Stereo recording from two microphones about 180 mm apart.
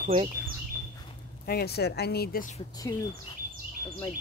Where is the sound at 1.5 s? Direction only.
60° left (ahead or behind).